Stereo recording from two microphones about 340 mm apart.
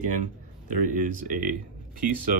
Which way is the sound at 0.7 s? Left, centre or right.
Right.